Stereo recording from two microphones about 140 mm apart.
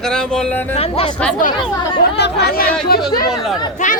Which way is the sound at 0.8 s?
45° left (ahead or behind).